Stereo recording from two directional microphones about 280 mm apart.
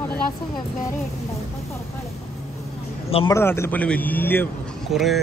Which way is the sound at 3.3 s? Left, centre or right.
Centre.